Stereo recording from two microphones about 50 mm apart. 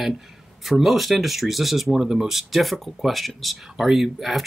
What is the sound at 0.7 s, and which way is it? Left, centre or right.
Speech, centre.